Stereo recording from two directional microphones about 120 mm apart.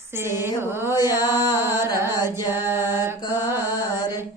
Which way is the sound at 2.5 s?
20° right (ahead or behind).